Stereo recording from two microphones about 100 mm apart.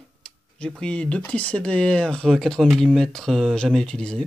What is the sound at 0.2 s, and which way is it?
Speech, 5° left (ahead or behind).